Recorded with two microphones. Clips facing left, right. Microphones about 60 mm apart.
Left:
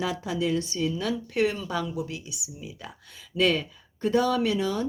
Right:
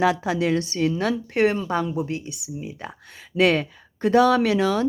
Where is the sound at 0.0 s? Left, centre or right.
Right.